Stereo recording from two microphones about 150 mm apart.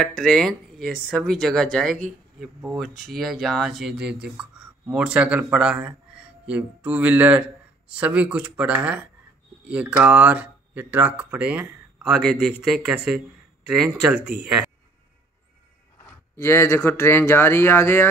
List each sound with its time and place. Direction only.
0.0 s speech: 5° left (ahead or behind)
16.3 s speech: 20° left (ahead or behind)